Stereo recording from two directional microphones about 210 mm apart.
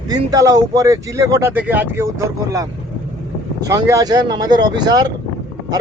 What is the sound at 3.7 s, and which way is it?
Speech, 15° right (ahead or behind).